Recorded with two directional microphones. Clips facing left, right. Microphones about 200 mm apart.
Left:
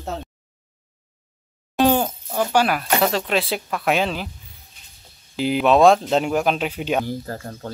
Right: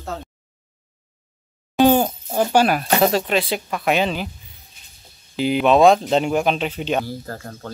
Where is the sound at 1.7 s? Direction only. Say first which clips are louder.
Right 3 dB; 5° right (ahead or behind).